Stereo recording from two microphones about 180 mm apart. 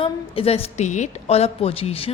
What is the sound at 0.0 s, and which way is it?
A woman's voice, 30° left (ahead or behind).